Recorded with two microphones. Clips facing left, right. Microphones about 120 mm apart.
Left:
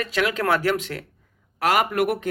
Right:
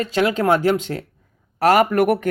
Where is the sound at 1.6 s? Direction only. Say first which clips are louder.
Right 6 dB; 40° right (ahead or behind).